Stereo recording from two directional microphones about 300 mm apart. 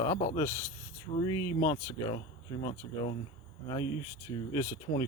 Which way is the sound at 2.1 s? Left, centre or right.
Centre.